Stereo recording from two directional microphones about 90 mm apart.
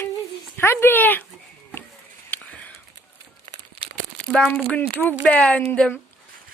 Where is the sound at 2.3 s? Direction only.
15° left (ahead or behind).